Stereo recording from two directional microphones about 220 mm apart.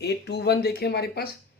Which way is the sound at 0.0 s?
50° left (ahead or behind).